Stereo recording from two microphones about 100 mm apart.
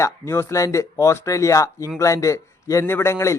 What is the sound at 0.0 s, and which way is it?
A man's voice, 30° left (ahead or behind).